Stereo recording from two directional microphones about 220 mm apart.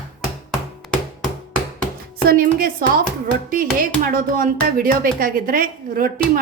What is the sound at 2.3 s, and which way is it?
A woman's voice, 40° right (ahead or behind).